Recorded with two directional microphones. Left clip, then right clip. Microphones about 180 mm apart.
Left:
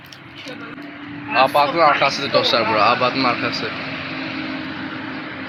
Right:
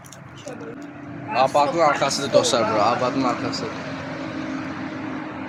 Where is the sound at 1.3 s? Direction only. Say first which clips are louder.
Left 3 dB; 5° right (ahead or behind); by 2.8 s 20° right (ahead or behind).